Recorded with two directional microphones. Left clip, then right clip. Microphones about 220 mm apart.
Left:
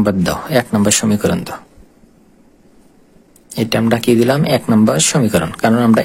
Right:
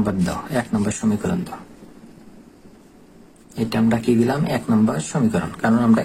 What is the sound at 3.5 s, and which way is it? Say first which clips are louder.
Speech: left 6 dB; 40° left (ahead or behind).